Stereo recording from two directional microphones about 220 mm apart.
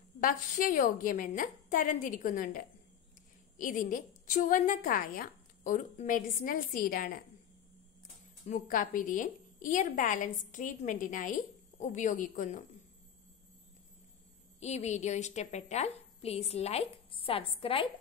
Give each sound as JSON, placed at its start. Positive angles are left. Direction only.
{"t": 0.2, "sound": "a woman's voice", "side_deg": 40}
{"t": 8.5, "sound": "a woman's voice", "side_deg": 40}
{"t": 14.6, "sound": "a woman's voice", "side_deg": 30}